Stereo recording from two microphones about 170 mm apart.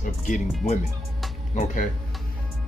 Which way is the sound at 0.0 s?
50° left (ahead or behind).